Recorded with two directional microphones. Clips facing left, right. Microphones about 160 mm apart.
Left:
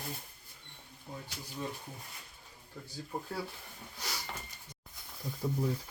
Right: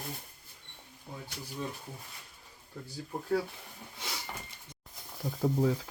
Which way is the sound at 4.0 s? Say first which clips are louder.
Right 1 dB; 15° right (ahead or behind).